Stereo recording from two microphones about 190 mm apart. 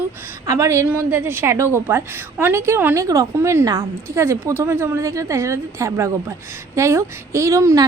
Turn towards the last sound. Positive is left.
turn(degrees=-15)  # may be behind; listen again after turning